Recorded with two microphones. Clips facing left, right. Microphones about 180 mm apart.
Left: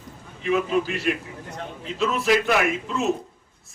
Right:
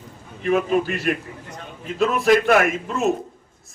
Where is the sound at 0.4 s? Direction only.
50° right (ahead or behind).